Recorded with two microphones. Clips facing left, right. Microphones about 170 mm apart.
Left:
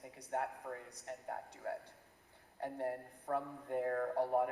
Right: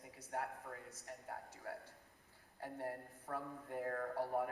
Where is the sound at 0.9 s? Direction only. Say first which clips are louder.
Left 5 dB; 20° left (ahead or behind).